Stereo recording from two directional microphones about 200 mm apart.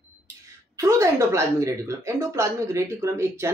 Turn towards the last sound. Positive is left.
turn(degrees=-15)  # may be behind; listen again after turning